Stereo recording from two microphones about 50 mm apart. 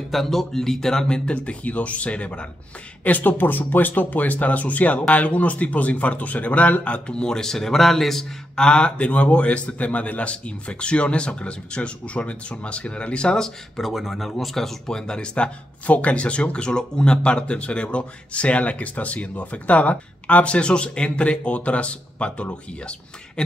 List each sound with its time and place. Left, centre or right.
0.1 s speech: centre; by 2.4 s left
3.0 s speech: left; by 13.5 s centre
13.7 s speech: centre; by 23.4 s left